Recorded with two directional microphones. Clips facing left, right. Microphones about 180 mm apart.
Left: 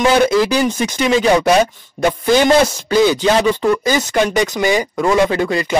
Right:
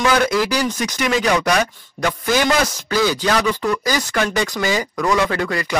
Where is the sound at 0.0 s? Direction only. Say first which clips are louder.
Left 5 dB; 25° left (ahead or behind).